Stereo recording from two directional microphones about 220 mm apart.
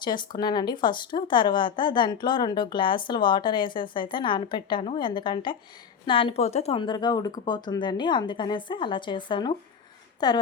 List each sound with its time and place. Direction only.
0.0 s a woman's voice: 20° left (ahead or behind)